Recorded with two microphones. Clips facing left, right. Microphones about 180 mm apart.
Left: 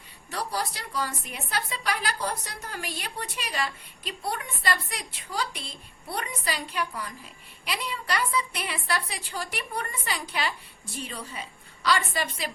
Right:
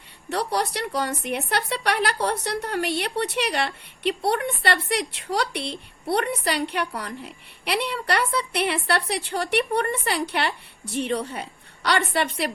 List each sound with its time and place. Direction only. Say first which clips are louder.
0.3 s a woman's voice: right 6 dB; 70° right (ahead or behind)